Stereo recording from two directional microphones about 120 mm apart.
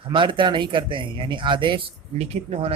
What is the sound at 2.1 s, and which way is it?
Speech, 60° right (ahead or behind).